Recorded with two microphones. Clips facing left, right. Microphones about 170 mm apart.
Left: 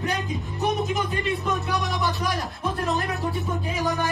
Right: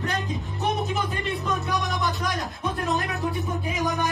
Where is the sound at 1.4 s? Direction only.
Centre (ahead or behind).